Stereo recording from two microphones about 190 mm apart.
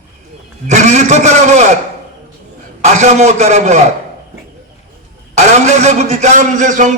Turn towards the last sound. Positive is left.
turn(degrees=-40)  # may be behind; listen again after turning